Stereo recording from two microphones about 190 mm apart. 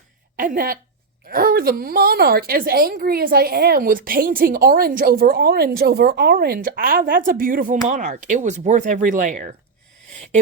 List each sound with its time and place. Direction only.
0.3 s a woman's voice: 50° right (ahead or behind)